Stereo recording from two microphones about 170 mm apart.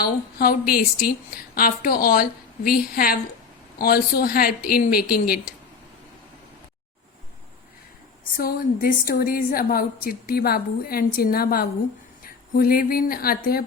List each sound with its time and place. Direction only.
0.0 s a woman's voice: 60° left (ahead or behind)
8.4 s a woman's voice: 60° left (ahead or behind)